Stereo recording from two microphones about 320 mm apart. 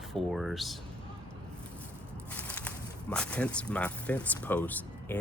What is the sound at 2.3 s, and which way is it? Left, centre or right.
Speech, centre.